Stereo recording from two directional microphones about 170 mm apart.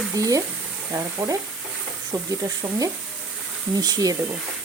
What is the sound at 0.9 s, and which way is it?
Frying, 15° right (ahead or behind).